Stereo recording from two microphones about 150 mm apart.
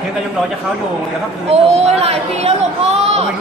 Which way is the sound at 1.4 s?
45° right (ahead or behind).